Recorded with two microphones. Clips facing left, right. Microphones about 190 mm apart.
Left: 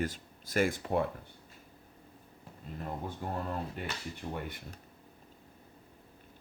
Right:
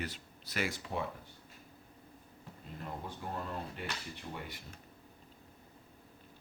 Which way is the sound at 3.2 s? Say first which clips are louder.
Left 4 dB; 45° left (ahead or behind).